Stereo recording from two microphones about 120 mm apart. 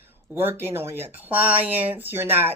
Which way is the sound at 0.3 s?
15° right (ahead or behind).